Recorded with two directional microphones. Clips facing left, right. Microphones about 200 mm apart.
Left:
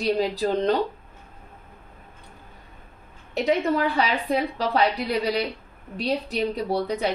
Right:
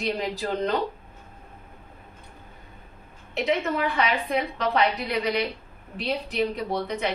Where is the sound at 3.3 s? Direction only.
35° left (ahead or behind).